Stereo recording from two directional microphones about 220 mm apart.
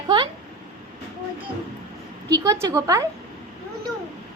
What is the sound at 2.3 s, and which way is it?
Speech, 15° right (ahead or behind).